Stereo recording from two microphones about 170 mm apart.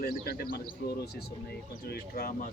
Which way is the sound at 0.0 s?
65° left (ahead or behind).